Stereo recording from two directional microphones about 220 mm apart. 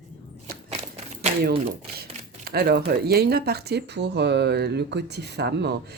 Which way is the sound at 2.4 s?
45° right (ahead or behind).